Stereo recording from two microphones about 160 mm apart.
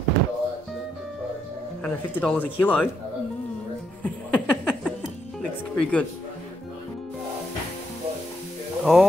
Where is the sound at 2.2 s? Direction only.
5° left (ahead or behind).